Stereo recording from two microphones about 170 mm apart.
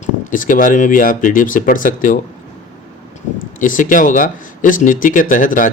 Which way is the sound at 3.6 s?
50° left (ahead or behind).